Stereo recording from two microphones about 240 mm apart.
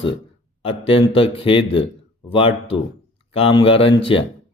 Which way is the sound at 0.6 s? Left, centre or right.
Left.